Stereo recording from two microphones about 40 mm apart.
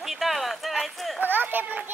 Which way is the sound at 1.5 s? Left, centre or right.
Right.